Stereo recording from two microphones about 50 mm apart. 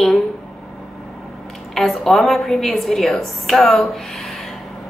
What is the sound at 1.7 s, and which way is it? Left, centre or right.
Speech, centre.